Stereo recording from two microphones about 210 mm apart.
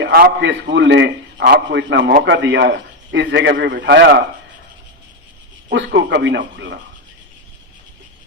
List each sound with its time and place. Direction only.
0.0 s a man's voice: 50° right (ahead or behind)
5.7 s a man's voice: 60° right (ahead or behind)